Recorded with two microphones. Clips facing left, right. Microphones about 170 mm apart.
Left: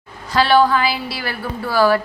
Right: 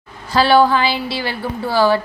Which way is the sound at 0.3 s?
30° right (ahead or behind).